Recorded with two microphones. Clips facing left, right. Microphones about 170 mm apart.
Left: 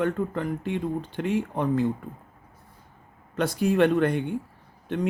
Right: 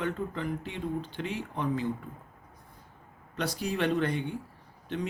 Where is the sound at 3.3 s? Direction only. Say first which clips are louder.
Left 9 dB; 50° left (ahead or behind).